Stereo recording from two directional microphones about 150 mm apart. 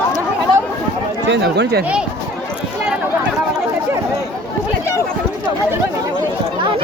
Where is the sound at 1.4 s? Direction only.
90° right.